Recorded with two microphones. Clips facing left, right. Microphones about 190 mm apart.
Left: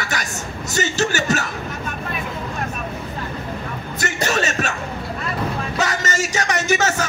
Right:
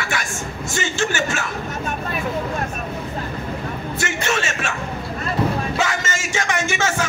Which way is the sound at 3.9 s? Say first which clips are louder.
Left 2 dB; 40° left (ahead or behind).